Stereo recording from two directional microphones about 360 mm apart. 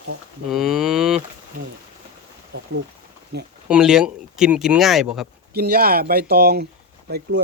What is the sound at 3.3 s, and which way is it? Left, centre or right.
Speech, right.